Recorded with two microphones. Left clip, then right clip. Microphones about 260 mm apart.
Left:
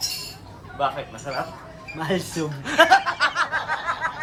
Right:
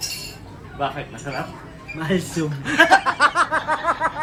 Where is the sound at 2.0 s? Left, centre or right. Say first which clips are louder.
Right 2 dB; left.